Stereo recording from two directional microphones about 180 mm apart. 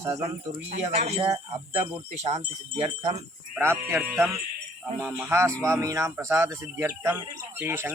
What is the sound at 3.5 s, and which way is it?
Speech, 15° right (ahead or behind).